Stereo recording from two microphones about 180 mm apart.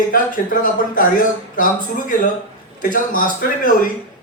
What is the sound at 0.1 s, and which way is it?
Speech, 50° left (ahead or behind).